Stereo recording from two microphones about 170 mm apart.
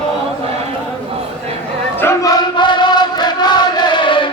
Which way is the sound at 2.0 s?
15° left (ahead or behind).